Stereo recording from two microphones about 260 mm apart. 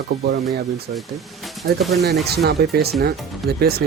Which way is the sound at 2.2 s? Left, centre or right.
Right.